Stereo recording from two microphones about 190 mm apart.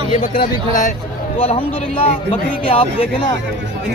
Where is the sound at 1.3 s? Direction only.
30° left (ahead or behind).